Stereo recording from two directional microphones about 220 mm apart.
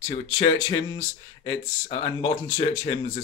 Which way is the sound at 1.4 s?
20° left (ahead or behind).